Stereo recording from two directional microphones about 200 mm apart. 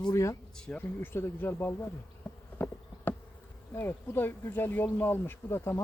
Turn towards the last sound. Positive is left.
turn(degrees=15)  # may be behind; listen again after turning